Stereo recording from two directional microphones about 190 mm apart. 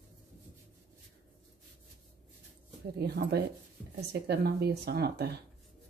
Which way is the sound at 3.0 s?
60° right (ahead or behind).